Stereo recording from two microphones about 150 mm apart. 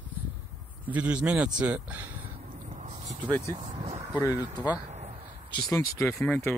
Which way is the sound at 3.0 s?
30° right (ahead or behind).